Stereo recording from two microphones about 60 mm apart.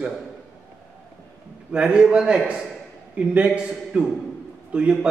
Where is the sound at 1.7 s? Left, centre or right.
Centre.